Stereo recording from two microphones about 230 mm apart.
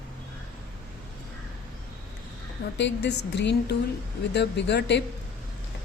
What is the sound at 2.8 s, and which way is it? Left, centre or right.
A woman's voice, left.